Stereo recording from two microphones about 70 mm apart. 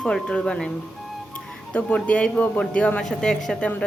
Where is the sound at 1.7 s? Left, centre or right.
Centre.